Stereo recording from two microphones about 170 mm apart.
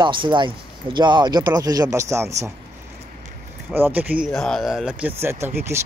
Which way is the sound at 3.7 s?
10° right (ahead or behind).